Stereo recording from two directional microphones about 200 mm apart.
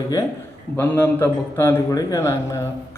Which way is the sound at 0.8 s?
10° left (ahead or behind).